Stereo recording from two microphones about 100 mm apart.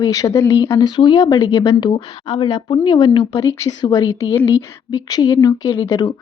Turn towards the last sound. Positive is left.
turn(degrees=40)  # may be behind; listen again after turning